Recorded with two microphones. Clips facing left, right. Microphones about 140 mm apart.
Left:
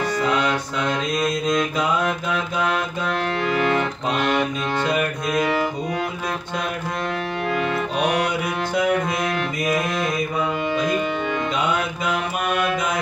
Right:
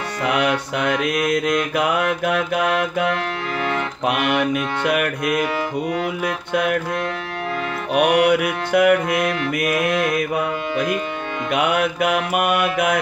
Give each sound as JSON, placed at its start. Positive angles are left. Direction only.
{"t": 0.2, "sound": "mantra", "side_deg": -70}
{"t": 3.5, "sound": "accordion", "side_deg": 0}
{"t": 4.1, "sound": "music", "side_deg": -70}
{"t": 4.8, "sound": "mantra", "side_deg": -65}
{"t": 5.3, "sound": "music", "side_deg": -10}
{"t": 6.5, "sound": "mantra", "side_deg": -65}
{"t": 7.9, "sound": "music", "side_deg": -65}
{"t": 9.7, "sound": "mantra", "side_deg": -5}
{"t": 10.0, "sound": "music", "side_deg": -65}
{"t": 11.5, "sound": "mantra", "side_deg": -65}